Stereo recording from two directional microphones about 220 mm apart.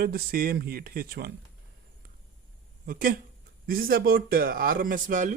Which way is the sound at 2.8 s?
40° right (ahead or behind).